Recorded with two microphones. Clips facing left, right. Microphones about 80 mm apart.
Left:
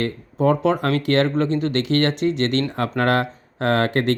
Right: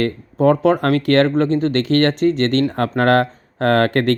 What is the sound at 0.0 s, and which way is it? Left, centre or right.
Speech, right.